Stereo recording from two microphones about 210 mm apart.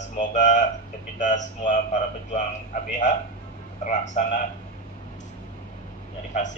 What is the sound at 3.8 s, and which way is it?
Speech, 35° left (ahead or behind).